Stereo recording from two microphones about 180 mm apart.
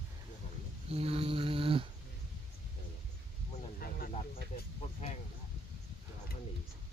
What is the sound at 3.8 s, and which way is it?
Vehicle, 55° left (ahead or behind).